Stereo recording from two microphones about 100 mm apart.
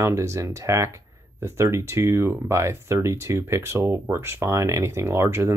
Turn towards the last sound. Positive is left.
turn(degrees=-25)  # may be behind; listen again after turning